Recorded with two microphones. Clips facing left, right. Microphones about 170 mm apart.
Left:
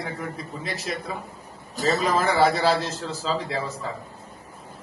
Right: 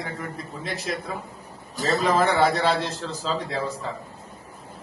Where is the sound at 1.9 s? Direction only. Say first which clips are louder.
Right 2 dB; centre (ahead or behind).